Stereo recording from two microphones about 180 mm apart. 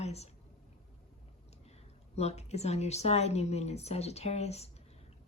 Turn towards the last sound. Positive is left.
turn(degrees=35)  # may be behind; listen again after turning